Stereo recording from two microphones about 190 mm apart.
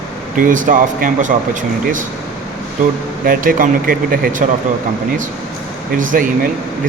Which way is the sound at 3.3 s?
45° right (ahead or behind).